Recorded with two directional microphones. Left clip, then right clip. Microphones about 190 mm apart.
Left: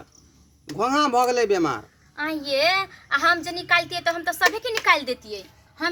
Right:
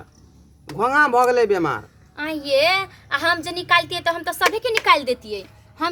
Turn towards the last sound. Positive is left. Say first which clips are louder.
# right 6 dB
turn(degrees=-45)  # may be behind; listen again after turning